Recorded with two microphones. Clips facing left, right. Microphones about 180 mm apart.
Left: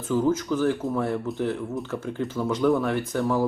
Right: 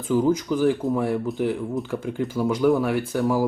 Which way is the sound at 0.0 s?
15° right (ahead or behind).